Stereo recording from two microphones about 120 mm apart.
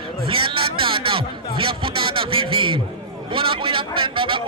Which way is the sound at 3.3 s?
45° right (ahead or behind).